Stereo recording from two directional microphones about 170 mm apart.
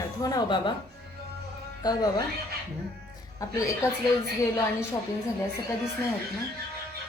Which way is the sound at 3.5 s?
20° left (ahead or behind).